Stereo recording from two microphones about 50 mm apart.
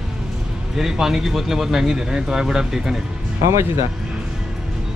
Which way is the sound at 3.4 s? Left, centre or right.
Right.